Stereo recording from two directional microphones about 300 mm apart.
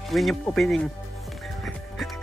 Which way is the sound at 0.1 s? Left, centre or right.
Centre.